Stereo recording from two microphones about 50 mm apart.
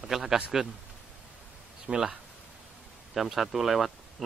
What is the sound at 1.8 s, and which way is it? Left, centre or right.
Speech, centre.